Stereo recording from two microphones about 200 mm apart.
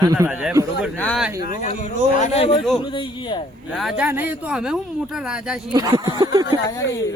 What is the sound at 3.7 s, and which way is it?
Speech, centre (ahead or behind).